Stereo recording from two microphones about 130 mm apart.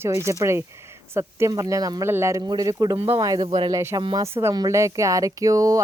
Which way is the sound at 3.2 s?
25° right (ahead or behind).